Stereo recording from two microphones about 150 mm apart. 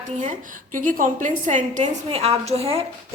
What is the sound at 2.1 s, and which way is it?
Speech, 40° right (ahead or behind).